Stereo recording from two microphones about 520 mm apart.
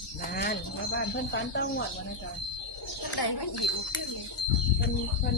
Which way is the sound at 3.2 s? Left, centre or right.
Left.